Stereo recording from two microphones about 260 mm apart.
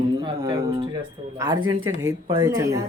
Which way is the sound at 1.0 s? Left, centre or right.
Centre.